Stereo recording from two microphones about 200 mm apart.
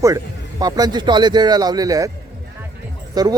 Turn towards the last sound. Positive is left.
turn(degrees=-20)  # may be behind; listen again after turning